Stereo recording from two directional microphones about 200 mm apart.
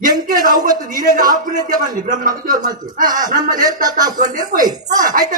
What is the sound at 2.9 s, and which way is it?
Speech, 40° right (ahead or behind).